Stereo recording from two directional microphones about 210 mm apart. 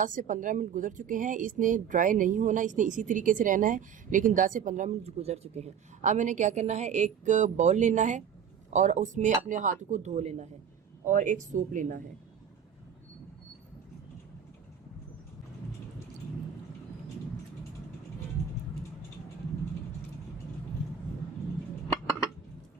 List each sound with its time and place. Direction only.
0.0 s speech: 40° right (ahead or behind)